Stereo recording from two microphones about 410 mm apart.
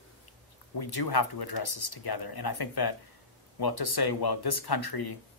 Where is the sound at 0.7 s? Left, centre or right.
Left.